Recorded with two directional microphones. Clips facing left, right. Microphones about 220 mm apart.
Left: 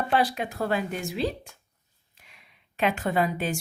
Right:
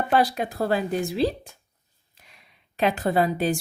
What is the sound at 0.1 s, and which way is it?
A woman's voice, 40° right (ahead or behind).